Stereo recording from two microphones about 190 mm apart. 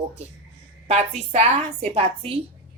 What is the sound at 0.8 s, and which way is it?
A woman's voice, 35° right (ahead or behind).